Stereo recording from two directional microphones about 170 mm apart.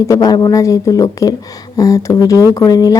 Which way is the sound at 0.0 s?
20° left (ahead or behind).